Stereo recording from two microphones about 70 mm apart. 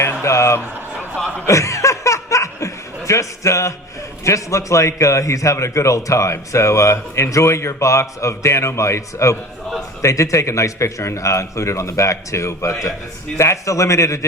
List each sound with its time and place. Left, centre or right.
0.0 s music: left
1.5 s chuckle: left
4.2 s a man's voice: left